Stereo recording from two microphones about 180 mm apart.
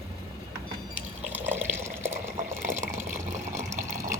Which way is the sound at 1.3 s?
10° right (ahead or behind).